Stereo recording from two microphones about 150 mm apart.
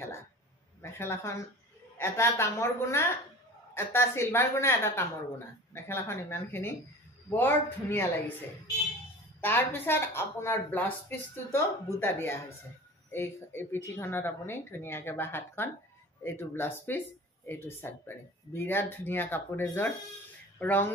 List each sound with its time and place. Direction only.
0.8 s a woman's voice: 15° left (ahead or behind)
9.4 s a woman's voice: 15° left (ahead or behind)